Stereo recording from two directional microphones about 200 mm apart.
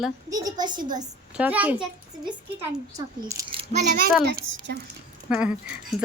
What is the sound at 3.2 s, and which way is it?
Speech, 20° right (ahead or behind).